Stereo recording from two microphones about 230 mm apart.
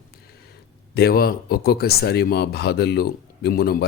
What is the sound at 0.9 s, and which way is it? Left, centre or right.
Speech, left.